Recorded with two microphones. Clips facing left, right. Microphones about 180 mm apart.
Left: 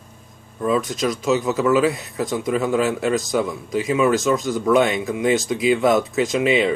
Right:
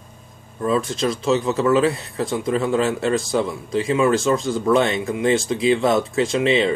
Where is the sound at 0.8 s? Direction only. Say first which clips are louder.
Even; 30° right (ahead or behind).